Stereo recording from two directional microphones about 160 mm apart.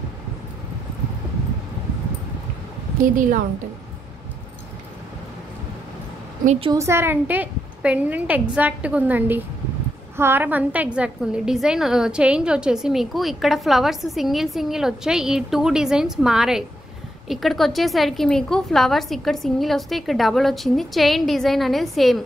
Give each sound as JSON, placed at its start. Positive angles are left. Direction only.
{"t": 3.0, "sound": "a woman's voice", "side_deg": -55}
{"t": 6.6, "sound": "a woman's voice", "side_deg": -20}